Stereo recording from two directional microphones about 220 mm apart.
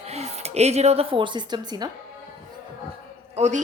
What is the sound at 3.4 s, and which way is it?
Speech, 30° right (ahead or behind).